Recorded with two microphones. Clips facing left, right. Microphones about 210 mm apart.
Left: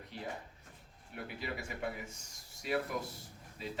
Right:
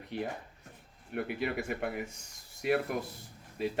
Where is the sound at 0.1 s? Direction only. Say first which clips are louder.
Right 7 dB; 65° right (ahead or behind).